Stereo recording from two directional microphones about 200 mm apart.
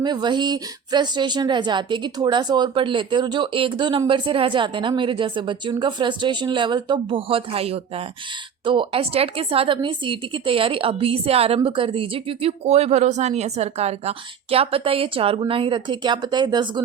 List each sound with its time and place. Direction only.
0.0 s a woman's voice: 20° right (ahead or behind)